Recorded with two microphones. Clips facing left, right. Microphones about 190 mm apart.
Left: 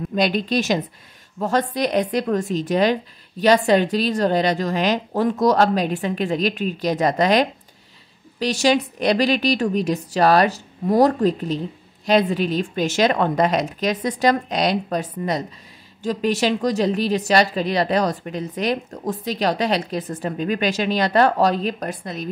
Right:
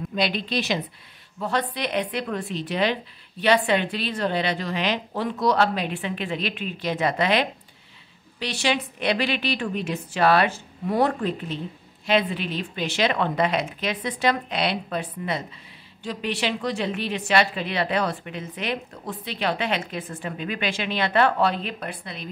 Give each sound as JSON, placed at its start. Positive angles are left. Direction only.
{"t": 0.1, "sound": "a woman's voice", "side_deg": 45}